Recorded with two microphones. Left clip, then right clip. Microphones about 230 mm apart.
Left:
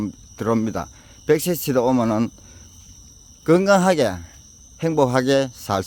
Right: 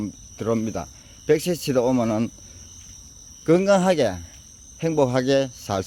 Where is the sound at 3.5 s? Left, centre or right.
Centre.